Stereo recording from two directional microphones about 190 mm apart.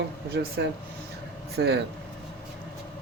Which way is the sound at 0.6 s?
65° right (ahead or behind).